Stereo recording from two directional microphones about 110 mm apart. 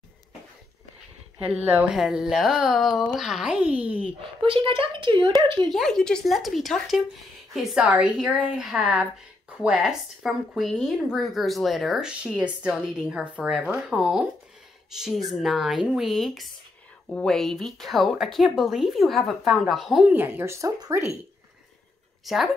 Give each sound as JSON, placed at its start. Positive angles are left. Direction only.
{"t": 1.4, "sound": "speech", "side_deg": -10}
{"t": 2.9, "sound": "speech", "side_deg": 40}
{"t": 3.2, "sound": "a woman's voice", "side_deg": -5}
{"t": 4.2, "sound": "speech", "side_deg": -55}
{"t": 5.7, "sound": "a woman's voice", "side_deg": 0}
{"t": 20.1, "sound": "speech", "side_deg": -20}
{"t": 22.2, "sound": "a woman's voice", "side_deg": 0}